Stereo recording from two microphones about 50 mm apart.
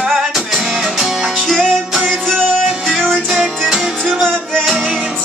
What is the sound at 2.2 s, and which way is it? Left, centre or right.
Music, centre.